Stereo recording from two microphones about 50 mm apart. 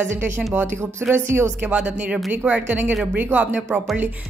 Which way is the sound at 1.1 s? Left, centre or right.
Right.